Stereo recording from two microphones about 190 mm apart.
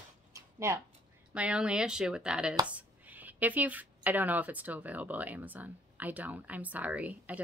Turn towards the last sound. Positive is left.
turn(degrees=-10)  # may be behind; listen again after turning